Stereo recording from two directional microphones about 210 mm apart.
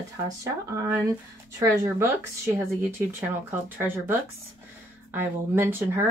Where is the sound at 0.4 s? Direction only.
15° right (ahead or behind).